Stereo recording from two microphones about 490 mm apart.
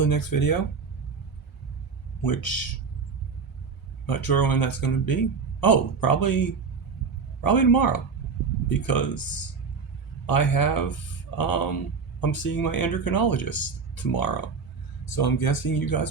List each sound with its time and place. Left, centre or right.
0.0 s a man's voice: left
2.2 s a man's voice: left
4.0 s a man's voice: left
7.4 s a man's voice: left
10.2 s a man's voice: left